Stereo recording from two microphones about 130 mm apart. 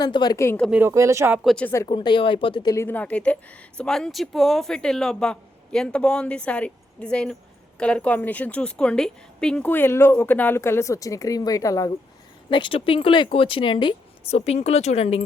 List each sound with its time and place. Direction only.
0.0 s speech: 35° left (ahead or behind)
0.7 s speech: 20° right (ahead or behind)
1.5 s a woman's voice: 5° left (ahead or behind)
1.9 s speech: 35° left (ahead or behind)
2.7 s a woman's voice: 15° left (ahead or behind)
12.5 s speech: 40° left (ahead or behind)
14.3 s speech: 55° left (ahead or behind)